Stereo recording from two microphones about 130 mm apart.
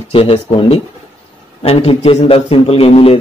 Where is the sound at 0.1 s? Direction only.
45° left (ahead or behind).